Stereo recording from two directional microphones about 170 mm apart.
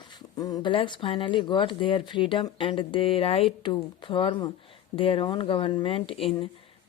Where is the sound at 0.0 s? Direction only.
25° left (ahead or behind).